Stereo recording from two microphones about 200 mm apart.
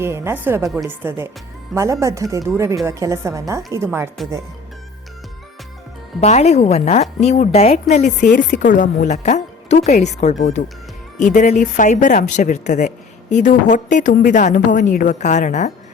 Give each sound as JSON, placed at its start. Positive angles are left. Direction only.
{"t": 0.0, "sound": "a woman's voice", "side_deg": -10}
{"t": 0.7, "sound": "speech", "side_deg": 0}
{"t": 1.0, "sound": "a woman's voice", "side_deg": -10}
{"t": 6.1, "sound": "a woman's voice", "side_deg": 35}